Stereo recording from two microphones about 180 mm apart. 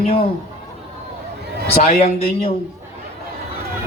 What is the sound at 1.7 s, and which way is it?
Speech, 35° left (ahead or behind).